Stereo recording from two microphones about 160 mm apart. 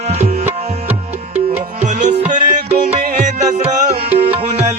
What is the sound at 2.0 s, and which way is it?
Music, 50° right (ahead or behind).